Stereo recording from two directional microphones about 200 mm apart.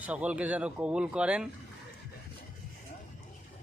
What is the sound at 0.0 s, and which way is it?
Speech, 5° right (ahead or behind).